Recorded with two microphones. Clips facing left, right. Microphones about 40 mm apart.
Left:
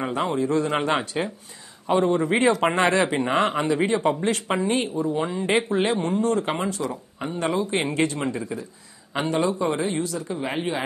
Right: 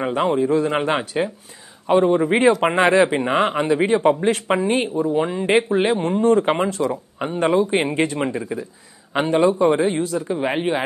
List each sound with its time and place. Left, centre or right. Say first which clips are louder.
0.0 s a man's voice: right 5 dB; centre
5.9 s speech: right 6 dB; right